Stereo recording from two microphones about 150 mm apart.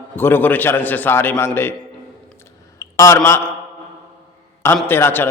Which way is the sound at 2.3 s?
20° left (ahead or behind).